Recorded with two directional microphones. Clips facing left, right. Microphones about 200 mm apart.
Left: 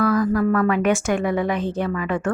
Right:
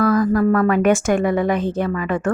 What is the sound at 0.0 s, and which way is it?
Speech, 45° right (ahead or behind).